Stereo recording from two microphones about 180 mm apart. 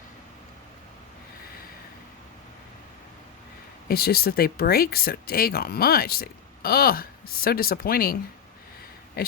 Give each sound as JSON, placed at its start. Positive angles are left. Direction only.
{"t": 3.8, "sound": "speech", "side_deg": 60}